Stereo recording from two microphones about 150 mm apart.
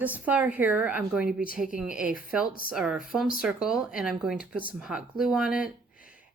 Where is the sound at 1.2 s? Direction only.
70° left (ahead or behind).